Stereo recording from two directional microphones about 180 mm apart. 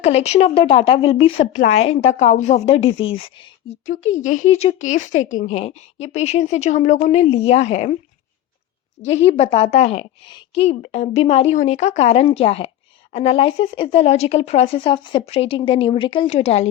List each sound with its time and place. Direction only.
0.0 s speech: 35° left (ahead or behind)
3.8 s speech: 40° left (ahead or behind)
9.0 s speech: 40° left (ahead or behind)